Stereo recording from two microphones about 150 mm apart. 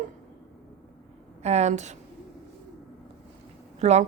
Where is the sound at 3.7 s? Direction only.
50° right (ahead or behind).